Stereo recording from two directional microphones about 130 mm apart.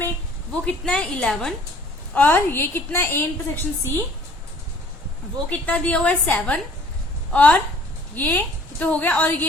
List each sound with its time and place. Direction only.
0.6 s a woman's voice: 10° left (ahead or behind)
2.1 s a woman's voice: 15° left (ahead or behind)
5.5 s a woman's voice: 10° left (ahead or behind)